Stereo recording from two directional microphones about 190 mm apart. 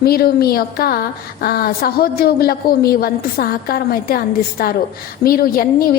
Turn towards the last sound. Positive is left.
turn(degrees=50)  # may be behind; listen again after turning